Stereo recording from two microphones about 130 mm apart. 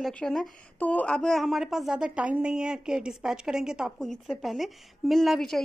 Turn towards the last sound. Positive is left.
turn(degrees=0)  # may be behind; listen again after turning